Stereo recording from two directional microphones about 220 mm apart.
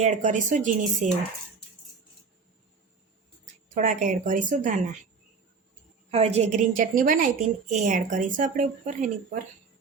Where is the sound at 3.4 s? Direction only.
35° right (ahead or behind).